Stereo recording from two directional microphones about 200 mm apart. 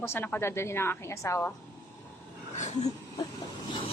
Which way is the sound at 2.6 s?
35° left (ahead or behind).